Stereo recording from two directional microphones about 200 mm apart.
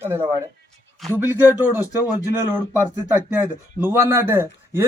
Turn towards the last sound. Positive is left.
turn(degrees=-10)  # may be behind; listen again after turning